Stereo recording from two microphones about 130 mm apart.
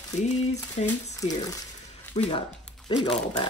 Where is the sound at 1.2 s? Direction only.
25° left (ahead or behind).